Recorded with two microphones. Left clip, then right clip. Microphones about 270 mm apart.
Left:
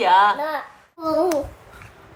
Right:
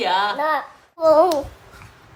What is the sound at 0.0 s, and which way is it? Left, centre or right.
Speech, centre.